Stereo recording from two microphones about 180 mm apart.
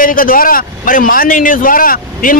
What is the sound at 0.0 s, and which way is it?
A man's voice, 50° left (ahead or behind).